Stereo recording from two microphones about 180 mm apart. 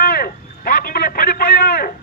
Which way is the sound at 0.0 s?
55° left (ahead or behind).